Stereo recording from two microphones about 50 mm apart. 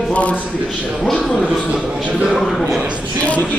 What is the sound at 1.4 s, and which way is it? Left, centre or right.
Speech, centre.